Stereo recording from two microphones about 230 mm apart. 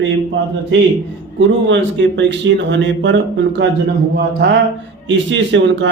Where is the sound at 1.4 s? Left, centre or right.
Right.